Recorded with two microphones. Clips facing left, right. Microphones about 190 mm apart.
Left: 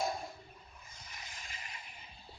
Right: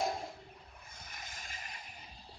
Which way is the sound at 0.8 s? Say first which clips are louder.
Right 2 dB; 55° right (ahead or behind).